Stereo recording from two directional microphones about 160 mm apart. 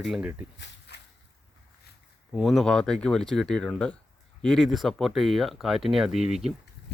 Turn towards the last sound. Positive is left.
turn(degrees=-5)  # may be behind; listen again after turning